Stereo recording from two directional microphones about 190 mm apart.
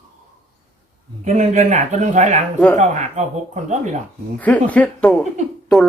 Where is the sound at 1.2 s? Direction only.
40° right (ahead or behind).